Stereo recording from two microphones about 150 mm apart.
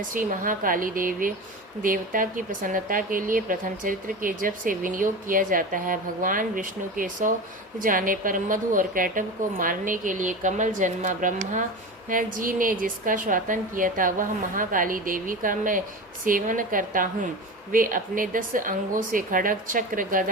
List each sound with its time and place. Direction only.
0.1 s speech: 65° right (ahead or behind)